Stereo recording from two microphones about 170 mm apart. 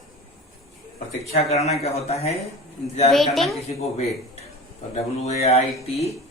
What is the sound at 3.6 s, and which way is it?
A man's voice, 40° left (ahead or behind).